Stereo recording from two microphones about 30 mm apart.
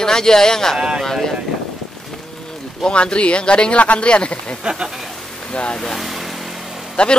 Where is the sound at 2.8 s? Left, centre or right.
Left.